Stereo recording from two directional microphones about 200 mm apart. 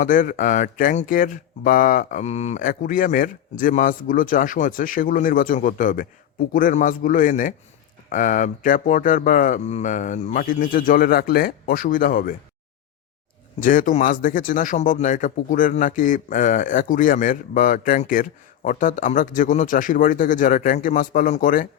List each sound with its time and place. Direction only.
0.0 s speech: 40° left (ahead or behind)
13.6 s speech: 40° left (ahead or behind)